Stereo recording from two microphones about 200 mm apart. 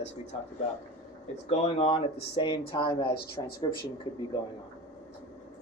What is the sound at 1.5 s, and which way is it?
Speech, 30° left (ahead or behind).